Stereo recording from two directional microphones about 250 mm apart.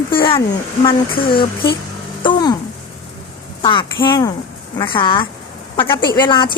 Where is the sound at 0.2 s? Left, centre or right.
Centre.